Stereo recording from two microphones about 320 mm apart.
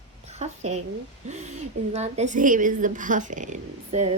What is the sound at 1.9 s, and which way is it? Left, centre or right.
Speech, right.